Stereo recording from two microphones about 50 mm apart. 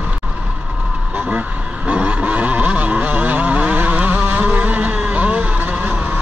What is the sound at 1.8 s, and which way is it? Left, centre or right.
Vehicle, right.